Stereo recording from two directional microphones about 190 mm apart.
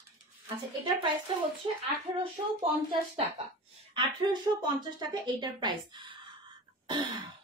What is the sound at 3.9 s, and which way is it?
Speech, 25° right (ahead or behind).